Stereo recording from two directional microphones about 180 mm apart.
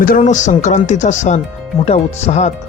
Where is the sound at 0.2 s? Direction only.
40° left (ahead or behind).